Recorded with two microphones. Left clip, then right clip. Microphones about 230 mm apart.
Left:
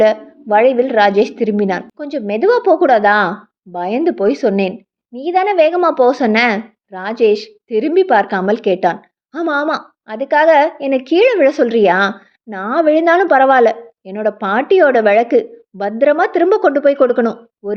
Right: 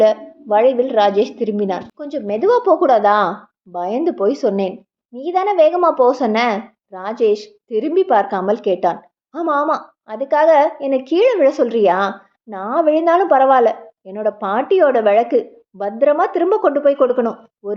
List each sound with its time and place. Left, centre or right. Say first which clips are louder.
0.0 s a woman's voice: left 1 dB; left